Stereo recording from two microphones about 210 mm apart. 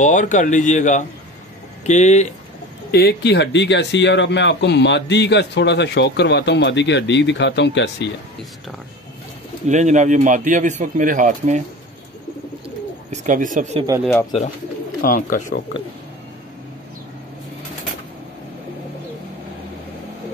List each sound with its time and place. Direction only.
0.0 s speech: 35° left (ahead or behind)
2.9 s speech: 50° left (ahead or behind)
9.7 s speech: 35° right (ahead or behind)
13.1 s speech: 35° right (ahead or behind)
14.0 s speech: 5° left (ahead or behind)
15.0 s speech: 40° left (ahead or behind)